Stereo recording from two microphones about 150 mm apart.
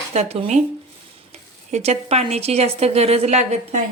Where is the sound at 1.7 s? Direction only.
45° right (ahead or behind).